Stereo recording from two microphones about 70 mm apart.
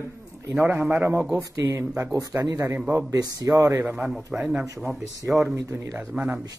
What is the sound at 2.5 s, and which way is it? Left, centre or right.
Speech, right.